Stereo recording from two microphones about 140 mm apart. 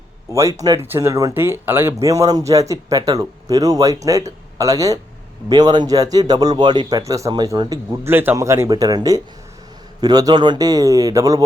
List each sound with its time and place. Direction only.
0.3 s speech: 20° right (ahead or behind)
7.9 s speech: 15° right (ahead or behind)